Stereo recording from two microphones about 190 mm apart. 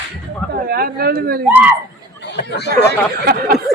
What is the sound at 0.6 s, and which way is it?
Speech, 55° right (ahead or behind).